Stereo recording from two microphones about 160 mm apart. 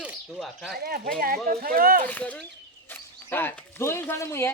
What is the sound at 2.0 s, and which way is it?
Speech, 10° left (ahead or behind).